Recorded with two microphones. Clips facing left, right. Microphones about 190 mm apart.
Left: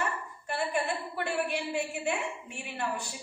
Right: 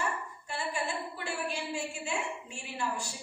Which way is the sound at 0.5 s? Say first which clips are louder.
Left 4 dB; 60° left (ahead or behind).